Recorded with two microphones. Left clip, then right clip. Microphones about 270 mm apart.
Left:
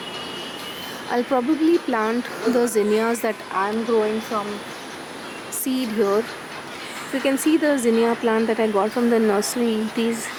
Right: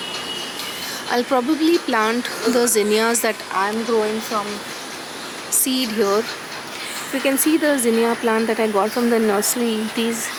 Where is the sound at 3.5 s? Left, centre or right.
Centre.